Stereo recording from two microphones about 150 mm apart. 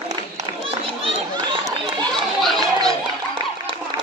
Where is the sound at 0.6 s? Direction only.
35° right (ahead or behind).